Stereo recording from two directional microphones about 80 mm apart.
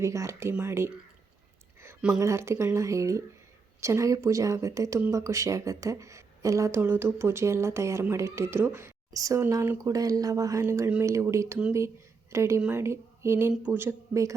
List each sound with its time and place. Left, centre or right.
0.0 s a woman's voice: right
2.1 s a woman's voice: right
9.1 s a woman's voice: right
13.6 s speech: centre
13.8 s a woman's voice: right